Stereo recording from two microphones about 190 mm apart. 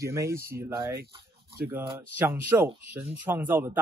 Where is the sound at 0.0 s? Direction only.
15° right (ahead or behind).